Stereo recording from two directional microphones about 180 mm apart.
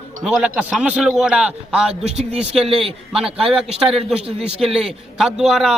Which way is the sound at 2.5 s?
30° right (ahead or behind).